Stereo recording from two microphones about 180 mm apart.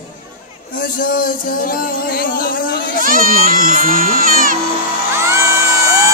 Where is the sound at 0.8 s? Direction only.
50° left (ahead or behind).